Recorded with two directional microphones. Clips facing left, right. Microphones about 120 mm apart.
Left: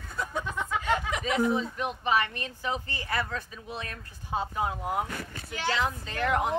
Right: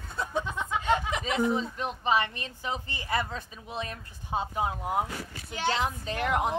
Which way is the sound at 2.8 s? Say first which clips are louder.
Right 1 dB; 20° right (ahead or behind).